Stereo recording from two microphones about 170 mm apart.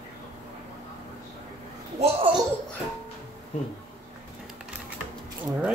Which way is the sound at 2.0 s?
35° right (ahead or behind).